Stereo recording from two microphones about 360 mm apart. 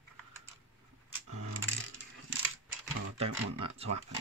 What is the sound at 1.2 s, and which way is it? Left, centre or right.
Coin, right.